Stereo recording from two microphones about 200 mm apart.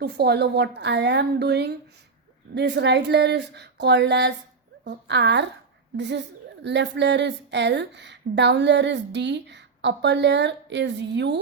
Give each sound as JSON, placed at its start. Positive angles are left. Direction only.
{"t": 0.0, "sound": "a woman's voice", "side_deg": -55}